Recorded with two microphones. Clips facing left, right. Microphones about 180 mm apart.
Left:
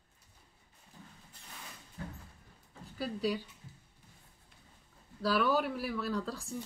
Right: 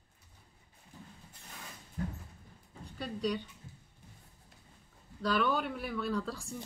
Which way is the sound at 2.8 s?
5° left (ahead or behind).